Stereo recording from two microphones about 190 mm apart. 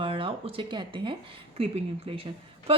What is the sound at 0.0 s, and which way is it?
Speech, 30° right (ahead or behind).